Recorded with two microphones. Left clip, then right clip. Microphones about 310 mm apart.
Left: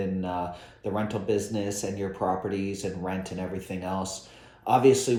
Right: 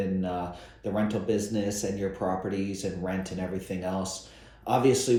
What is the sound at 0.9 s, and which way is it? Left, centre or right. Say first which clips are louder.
Speech: even; centre.